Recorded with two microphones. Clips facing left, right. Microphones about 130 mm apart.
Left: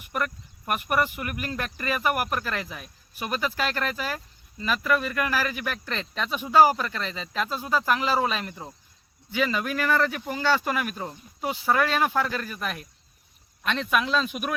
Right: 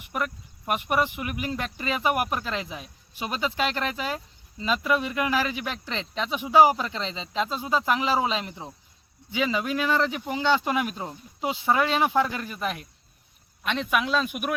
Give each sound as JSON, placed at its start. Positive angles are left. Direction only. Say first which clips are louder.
{"t": 0.0, "sound": "speech", "louder": "even", "side_deg": -15}